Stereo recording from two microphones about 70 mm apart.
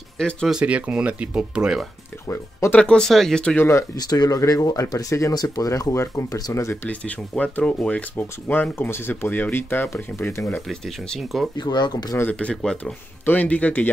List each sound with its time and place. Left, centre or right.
0.2 s speech: centre
0.5 s speech: centre
2.7 s speech: centre
3.9 s speech: left
4.4 s speech: left
4.6 s speech: left
5.3 s speech: left
5.7 s speech: left
6.5 s speech: left
6.9 s speech: centre; by 10.4 s left
10.7 s speech: centre
11.5 s speech: left
12.3 s speech: centre
13.2 s speech: left